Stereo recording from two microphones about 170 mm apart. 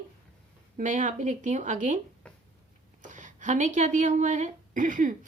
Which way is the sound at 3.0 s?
45° right (ahead or behind).